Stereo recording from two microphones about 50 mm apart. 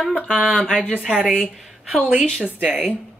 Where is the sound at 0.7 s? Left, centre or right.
Centre.